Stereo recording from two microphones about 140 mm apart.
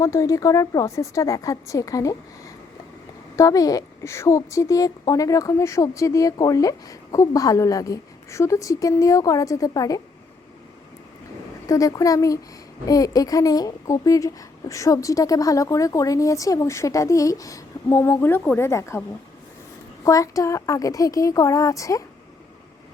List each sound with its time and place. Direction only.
0.0 s a woman's voice: 20° left (ahead or behind)
3.3 s a woman's voice: 25° left (ahead or behind)
11.6 s a woman's voice: 25° left (ahead or behind)
20.1 s a woman's voice: 25° left (ahead or behind)